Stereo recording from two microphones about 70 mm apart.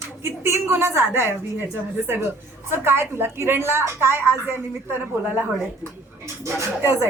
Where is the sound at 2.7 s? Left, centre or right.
Right.